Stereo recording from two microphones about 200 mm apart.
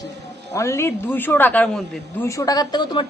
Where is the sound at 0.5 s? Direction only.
15° left (ahead or behind).